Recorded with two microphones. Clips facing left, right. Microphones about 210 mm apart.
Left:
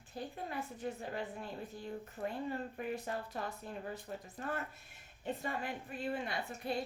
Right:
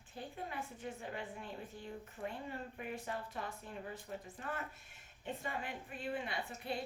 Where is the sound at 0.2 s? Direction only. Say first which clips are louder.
Left 3 dB; 40° left (ahead or behind).